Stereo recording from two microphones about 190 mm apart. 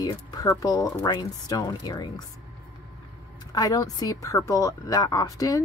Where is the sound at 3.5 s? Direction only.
20° left (ahead or behind).